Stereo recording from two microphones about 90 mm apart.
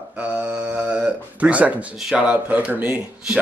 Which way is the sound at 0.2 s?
15° right (ahead or behind).